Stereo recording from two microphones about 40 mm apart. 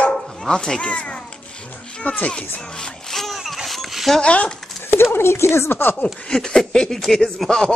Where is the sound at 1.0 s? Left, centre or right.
Left.